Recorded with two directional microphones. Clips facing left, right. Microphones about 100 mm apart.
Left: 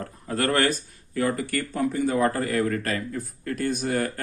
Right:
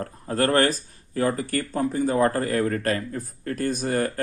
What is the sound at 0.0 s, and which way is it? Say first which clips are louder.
Speech: right 3 dB; 35° right (ahead or behind).